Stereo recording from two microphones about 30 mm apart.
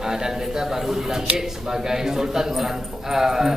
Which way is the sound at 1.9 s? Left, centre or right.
Centre.